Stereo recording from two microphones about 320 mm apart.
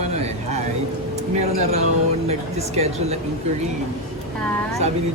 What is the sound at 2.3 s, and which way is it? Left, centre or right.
Speech, centre.